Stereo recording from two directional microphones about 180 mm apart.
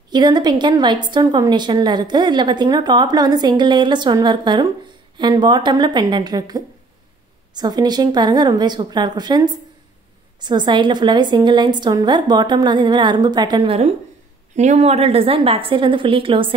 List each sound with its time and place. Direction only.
0.1 s a woman's voice: 25° right (ahead or behind)
14.5 s a woman's voice: 40° right (ahead or behind)